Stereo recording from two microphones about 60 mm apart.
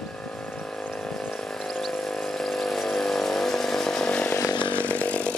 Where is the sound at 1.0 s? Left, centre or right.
Centre.